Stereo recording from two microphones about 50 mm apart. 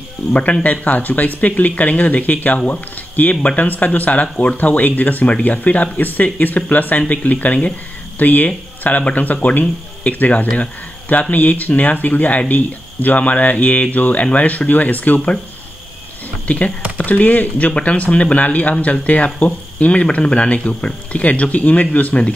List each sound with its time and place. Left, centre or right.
0.3 s speech: left
16.4 s speech: left